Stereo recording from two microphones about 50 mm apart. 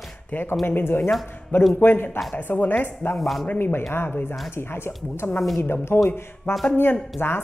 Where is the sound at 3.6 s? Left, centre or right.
Left.